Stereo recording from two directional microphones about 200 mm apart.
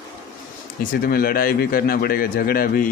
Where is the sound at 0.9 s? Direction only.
50° left (ahead or behind).